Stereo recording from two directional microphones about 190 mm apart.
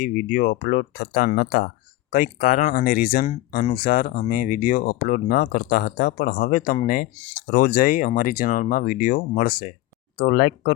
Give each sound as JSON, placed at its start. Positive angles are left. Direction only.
{"t": 0.0, "sound": "speech", "side_deg": 45}